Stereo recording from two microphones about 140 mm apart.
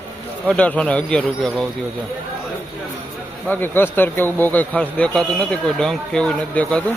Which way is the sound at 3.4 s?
15° left (ahead or behind).